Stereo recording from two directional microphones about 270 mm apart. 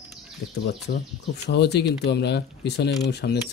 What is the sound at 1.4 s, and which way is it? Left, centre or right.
Speech, left.